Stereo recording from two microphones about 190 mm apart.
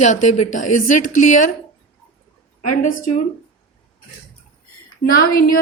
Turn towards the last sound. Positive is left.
turn(degrees=50)  # may be behind; listen again after turning